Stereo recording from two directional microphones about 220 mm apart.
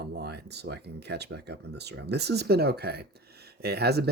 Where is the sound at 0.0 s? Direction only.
50° right (ahead or behind).